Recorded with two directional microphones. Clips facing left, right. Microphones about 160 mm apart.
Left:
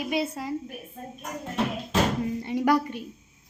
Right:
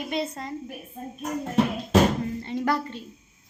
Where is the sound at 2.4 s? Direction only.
15° left (ahead or behind).